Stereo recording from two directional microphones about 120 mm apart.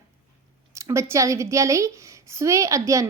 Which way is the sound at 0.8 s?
25° right (ahead or behind).